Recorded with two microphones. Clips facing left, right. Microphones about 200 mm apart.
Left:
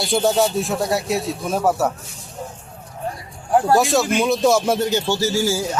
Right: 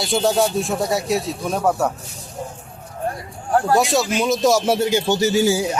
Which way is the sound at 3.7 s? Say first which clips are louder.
Left 1 dB; centre (ahead or behind).